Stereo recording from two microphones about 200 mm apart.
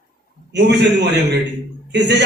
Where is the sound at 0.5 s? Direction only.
60° right (ahead or behind).